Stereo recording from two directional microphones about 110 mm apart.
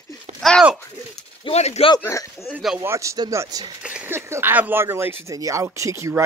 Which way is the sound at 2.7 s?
30° right (ahead or behind).